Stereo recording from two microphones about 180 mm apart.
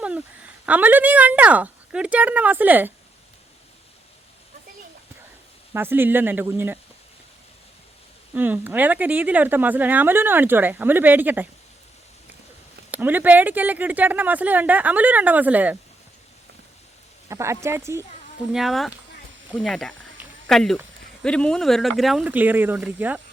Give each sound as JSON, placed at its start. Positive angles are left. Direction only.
{"t": 0.6, "sound": "speech", "side_deg": -10}
{"t": 5.7, "sound": "speech", "side_deg": -10}
{"t": 8.4, "sound": "speech", "side_deg": -10}
{"t": 12.9, "sound": "speech", "side_deg": -10}
{"t": 17.2, "sound": "speech", "side_deg": -15}
{"t": 18.5, "sound": "speech", "side_deg": 0}